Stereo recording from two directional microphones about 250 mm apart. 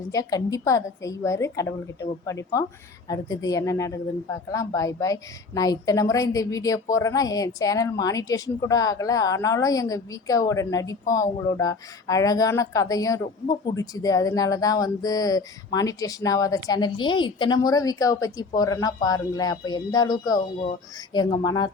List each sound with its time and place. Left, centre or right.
0.1 s speech: centre